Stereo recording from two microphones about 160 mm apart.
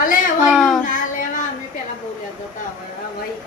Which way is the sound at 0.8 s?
55° left (ahead or behind).